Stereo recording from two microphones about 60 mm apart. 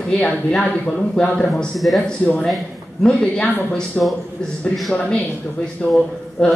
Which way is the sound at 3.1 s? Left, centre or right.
Centre.